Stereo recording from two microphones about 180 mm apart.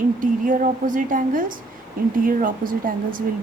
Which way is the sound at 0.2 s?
50° right (ahead or behind).